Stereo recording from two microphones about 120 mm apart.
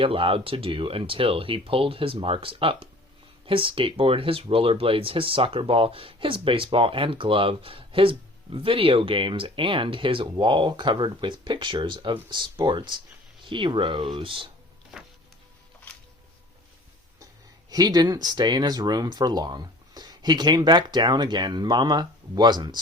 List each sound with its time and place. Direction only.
0.0 s speech: 50° right (ahead or behind)
17.7 s speech: 35° right (ahead or behind)